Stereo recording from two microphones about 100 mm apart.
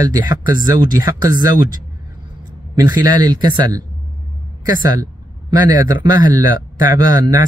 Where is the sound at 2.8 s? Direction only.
40° right (ahead or behind).